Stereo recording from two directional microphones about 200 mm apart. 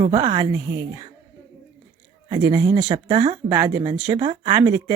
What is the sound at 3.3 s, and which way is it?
Speech, 20° right (ahead or behind).